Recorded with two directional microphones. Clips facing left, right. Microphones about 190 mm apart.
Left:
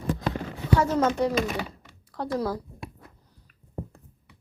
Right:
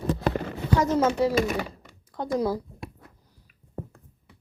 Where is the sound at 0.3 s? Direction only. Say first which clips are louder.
Right 6 dB; 45° right (ahead or behind).